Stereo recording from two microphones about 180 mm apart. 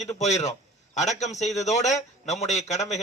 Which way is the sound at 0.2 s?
40° left (ahead or behind).